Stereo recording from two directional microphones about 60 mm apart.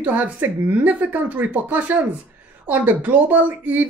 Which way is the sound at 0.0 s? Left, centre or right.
Right.